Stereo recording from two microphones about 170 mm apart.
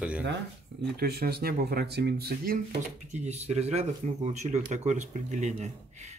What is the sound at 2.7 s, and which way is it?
Speech, 45° right (ahead or behind).